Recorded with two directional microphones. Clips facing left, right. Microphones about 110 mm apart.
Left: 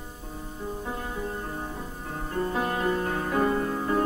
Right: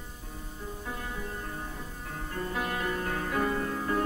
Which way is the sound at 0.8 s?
30° left (ahead or behind).